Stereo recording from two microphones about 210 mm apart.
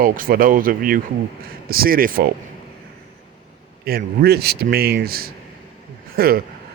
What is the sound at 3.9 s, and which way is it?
Speech, 45° right (ahead or behind).